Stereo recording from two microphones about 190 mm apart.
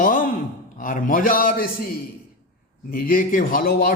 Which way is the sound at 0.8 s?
45° left (ahead or behind).